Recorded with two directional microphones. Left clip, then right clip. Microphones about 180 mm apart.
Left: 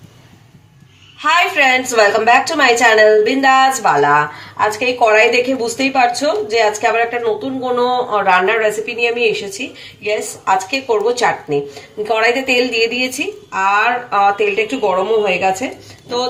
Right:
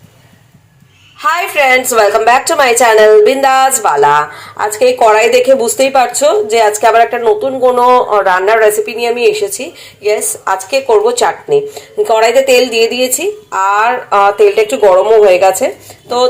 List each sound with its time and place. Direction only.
1.2 s a woman's voice: 30° right (ahead or behind)